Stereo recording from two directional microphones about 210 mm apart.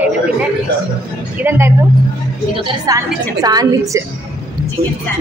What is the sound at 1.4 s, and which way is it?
Speech, 10° right (ahead or behind).